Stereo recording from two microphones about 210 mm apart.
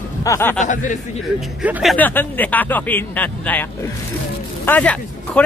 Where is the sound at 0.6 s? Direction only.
35° left (ahead or behind).